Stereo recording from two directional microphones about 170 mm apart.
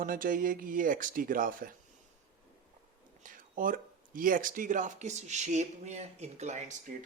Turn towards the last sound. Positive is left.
turn(degrees=-40)  # may be behind; listen again after turning